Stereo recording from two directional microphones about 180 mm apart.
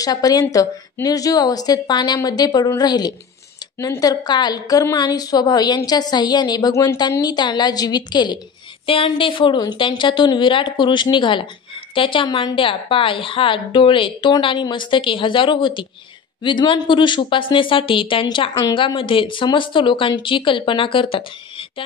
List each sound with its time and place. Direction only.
0.0 s a woman's voice: 20° left (ahead or behind)